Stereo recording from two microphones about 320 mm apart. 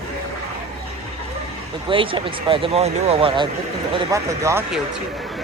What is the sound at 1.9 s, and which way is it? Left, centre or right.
Speech, centre.